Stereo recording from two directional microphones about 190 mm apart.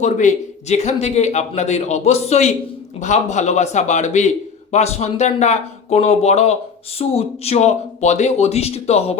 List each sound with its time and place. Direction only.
0.0 s a man's voice: 40° left (ahead or behind)